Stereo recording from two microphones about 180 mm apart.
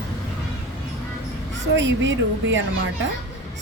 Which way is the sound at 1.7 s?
85° right.